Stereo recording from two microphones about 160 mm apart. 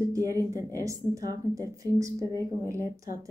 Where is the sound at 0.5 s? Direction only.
20° right (ahead or behind).